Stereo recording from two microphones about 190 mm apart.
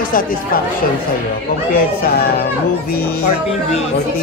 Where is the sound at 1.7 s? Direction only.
55° left (ahead or behind).